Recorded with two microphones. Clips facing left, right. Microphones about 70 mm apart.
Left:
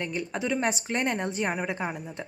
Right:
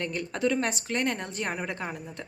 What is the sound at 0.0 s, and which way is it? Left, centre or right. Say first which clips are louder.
A woman's voice: right 2 dB; centre.